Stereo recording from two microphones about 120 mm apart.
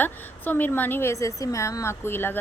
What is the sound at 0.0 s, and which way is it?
A woman's voice, 15° left (ahead or behind).